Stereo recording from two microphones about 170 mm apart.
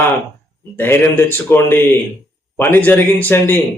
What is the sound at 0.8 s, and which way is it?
A man's voice, 10° left (ahead or behind).